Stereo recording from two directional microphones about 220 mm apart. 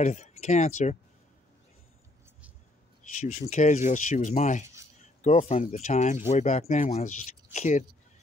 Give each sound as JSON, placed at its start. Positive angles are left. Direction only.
{"t": 0.0, "sound": "speech", "side_deg": 30}
{"t": 3.0, "sound": "speech", "side_deg": 35}